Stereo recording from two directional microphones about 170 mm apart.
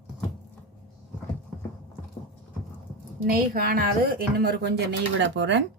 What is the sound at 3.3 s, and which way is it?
Speech, 55° right (ahead or behind).